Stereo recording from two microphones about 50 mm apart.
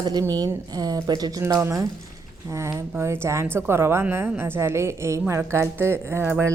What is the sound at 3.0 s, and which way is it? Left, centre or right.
A woman's voice, right.